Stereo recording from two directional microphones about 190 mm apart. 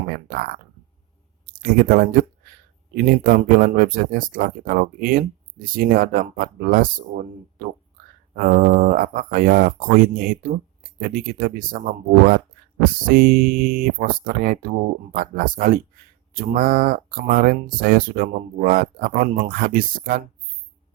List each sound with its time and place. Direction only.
0.3 s speech: 50° right (ahead or behind)
1.6 s speech: 50° right (ahead or behind)
8.4 s speech: 50° right (ahead or behind)
12.8 s speech: 50° right (ahead or behind)